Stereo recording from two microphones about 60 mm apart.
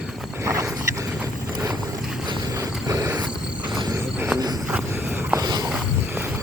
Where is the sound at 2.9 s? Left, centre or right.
Right.